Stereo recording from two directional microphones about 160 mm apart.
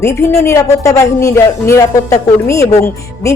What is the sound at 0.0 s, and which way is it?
A woman's voice, 15° left (ahead or behind).